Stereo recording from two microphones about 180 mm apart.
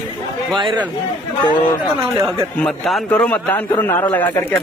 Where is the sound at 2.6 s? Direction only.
Centre (ahead or behind).